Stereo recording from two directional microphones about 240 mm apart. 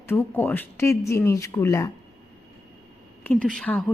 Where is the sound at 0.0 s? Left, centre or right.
Centre.